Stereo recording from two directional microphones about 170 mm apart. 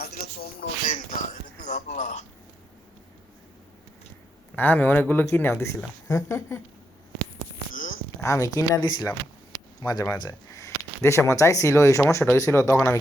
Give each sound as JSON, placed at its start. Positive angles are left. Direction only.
{"t": 0.9, "sound": "speech", "side_deg": 45}
{"t": 4.5, "sound": "speech", "side_deg": 10}
{"t": 8.2, "sound": "speech", "side_deg": 20}